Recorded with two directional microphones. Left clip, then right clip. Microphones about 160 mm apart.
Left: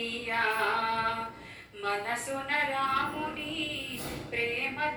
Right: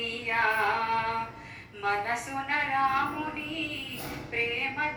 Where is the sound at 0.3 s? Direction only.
25° right (ahead or behind).